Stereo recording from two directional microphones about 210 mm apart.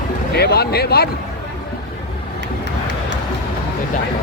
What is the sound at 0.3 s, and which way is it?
Speech, 50° left (ahead or behind).